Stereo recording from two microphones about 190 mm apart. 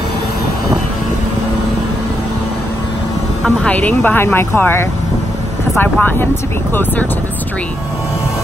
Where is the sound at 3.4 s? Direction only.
5° left (ahead or behind).